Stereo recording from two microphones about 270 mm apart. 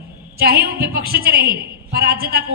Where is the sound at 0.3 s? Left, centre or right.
Right.